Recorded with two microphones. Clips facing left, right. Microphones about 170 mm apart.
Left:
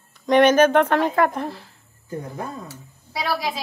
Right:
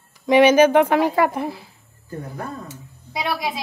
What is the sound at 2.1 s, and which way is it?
Speech, 20° left (ahead or behind).